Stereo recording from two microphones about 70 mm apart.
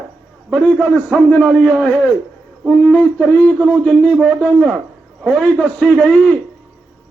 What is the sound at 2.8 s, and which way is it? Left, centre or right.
Speech, centre.